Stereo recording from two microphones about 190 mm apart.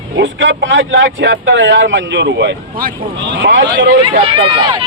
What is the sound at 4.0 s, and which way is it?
Speech, 25° right (ahead or behind).